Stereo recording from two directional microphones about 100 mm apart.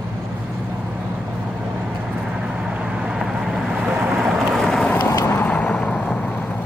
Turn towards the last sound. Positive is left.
turn(degrees=10)  # may be behind; listen again after turning